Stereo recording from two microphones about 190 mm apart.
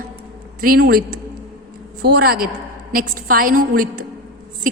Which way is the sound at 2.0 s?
55° right (ahead or behind).